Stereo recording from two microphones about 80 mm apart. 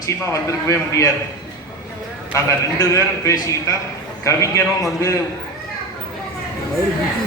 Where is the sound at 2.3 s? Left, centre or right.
Left.